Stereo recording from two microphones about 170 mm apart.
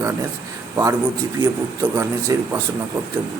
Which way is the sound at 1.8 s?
15° right (ahead or behind).